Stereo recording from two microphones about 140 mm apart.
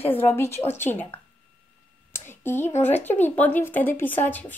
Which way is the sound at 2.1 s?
15° left (ahead or behind).